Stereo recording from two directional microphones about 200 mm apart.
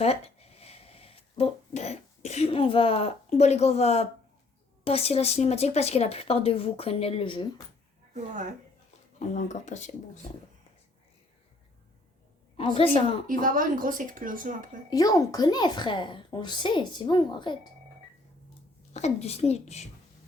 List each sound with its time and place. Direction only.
0.0 s a sound: 30° left (ahead or behind)
4.8 s a woman's voice: 30° left (ahead or behind)
9.1 s a woman's voice: 35° left (ahead or behind)
12.5 s a woman's voice: 30° left (ahead or behind)
13.2 s speech: 40° right (ahead or behind)
14.8 s a woman's voice: 20° left (ahead or behind)
18.9 s a woman's voice: 35° left (ahead or behind)